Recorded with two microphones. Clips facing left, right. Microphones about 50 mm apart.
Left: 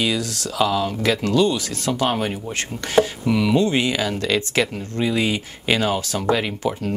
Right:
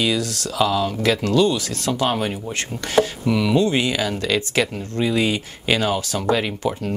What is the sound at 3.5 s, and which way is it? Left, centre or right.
Speech, left.